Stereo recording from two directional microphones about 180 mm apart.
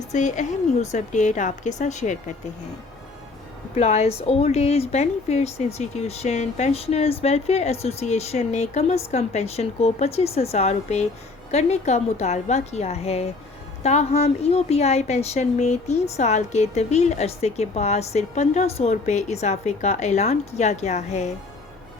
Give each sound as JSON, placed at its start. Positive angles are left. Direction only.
{"t": 0.1, "sound": "a woman's voice", "side_deg": 40}
{"t": 3.8, "sound": "a woman's voice", "side_deg": 40}